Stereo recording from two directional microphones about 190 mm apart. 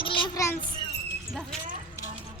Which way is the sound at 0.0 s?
25° left (ahead or behind).